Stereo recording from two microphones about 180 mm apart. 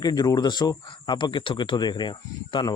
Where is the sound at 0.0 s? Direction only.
20° left (ahead or behind).